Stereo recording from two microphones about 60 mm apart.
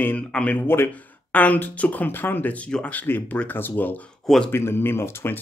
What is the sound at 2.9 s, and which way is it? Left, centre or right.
Speech, left.